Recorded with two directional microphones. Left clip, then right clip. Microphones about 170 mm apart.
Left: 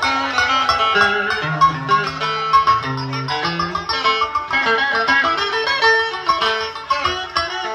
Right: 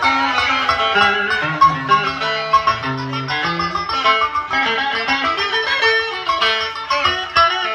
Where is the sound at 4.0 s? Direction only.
5° left (ahead or behind).